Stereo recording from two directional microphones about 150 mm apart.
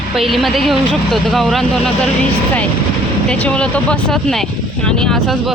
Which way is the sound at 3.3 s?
5° left (ahead or behind).